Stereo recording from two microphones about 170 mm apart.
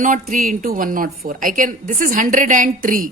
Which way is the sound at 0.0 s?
50° right (ahead or behind).